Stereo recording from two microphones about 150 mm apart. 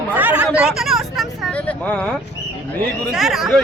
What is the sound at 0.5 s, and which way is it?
Vehicle, 5° right (ahead or behind).